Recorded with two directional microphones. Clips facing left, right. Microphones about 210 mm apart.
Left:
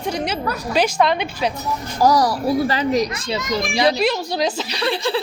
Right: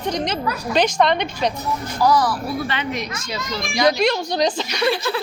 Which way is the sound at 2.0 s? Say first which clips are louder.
Left 2 dB; 40° left (ahead or behind).